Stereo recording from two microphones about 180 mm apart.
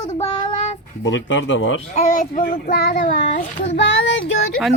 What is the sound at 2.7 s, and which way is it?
Child singing, 65° left (ahead or behind).